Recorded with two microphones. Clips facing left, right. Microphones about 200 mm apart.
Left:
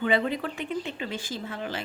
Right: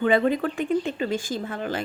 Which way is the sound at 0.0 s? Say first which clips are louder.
Right 5 dB; 45° right (ahead or behind).